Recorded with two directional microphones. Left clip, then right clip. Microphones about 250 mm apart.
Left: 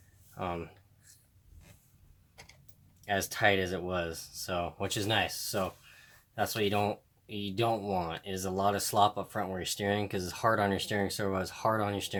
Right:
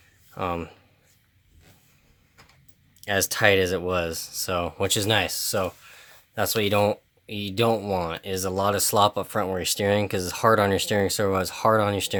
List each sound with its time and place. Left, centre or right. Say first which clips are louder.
0.3 s speech: right 8 dB; right
3.0 s speech: right 7 dB; right